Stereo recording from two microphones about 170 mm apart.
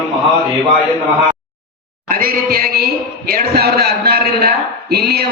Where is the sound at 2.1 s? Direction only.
60° right (ahead or behind).